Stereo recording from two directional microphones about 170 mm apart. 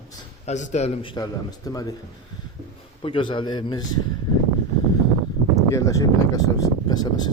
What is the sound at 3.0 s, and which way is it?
Speech, 30° left (ahead or behind).